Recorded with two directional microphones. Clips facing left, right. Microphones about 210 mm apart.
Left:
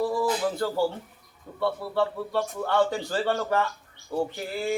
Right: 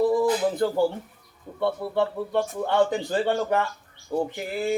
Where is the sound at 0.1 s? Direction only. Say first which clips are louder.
Right 4 dB; 20° right (ahead or behind).